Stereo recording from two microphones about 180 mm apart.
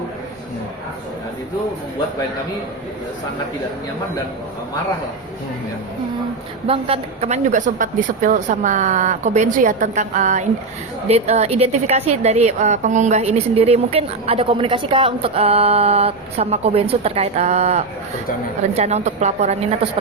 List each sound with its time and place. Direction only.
6.7 s a woman's voice: 30° right (ahead or behind)